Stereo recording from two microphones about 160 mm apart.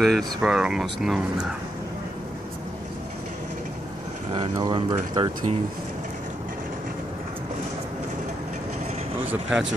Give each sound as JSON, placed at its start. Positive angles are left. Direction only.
{"t": 0.0, "sound": "speech", "side_deg": 0}
{"t": 4.3, "sound": "speech", "side_deg": -30}
{"t": 9.3, "sound": "speech", "side_deg": -5}